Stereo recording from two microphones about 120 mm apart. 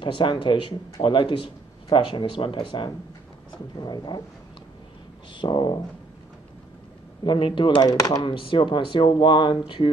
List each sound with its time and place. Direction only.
0.0 s speech: 40° left (ahead or behind)
5.3 s speech: 40° left (ahead or behind)
7.2 s speech: 45° left (ahead or behind)